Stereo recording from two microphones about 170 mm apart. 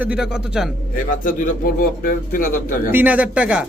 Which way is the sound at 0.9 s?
55° left (ahead or behind).